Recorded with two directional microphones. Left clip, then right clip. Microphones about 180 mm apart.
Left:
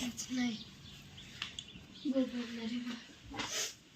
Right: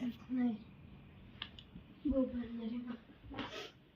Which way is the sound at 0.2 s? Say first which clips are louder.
Even; 40° right (ahead or behind).